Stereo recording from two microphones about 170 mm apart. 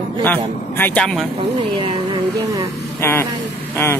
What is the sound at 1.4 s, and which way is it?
Speech, 35° right (ahead or behind).